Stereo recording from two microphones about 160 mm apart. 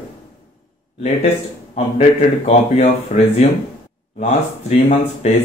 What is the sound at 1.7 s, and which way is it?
A man's voice, 45° left (ahead or behind).